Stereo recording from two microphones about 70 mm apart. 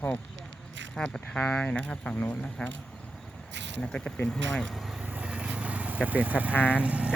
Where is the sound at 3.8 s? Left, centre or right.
Centre.